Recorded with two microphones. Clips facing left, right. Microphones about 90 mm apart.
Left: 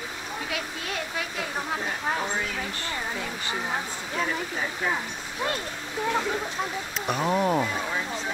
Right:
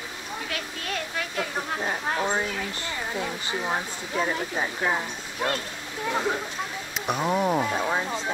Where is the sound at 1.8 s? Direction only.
25° right (ahead or behind).